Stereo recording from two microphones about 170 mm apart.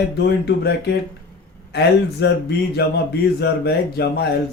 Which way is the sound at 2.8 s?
65° left (ahead or behind).